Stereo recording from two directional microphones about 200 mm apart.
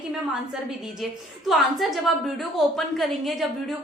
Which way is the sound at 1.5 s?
Centre (ahead or behind).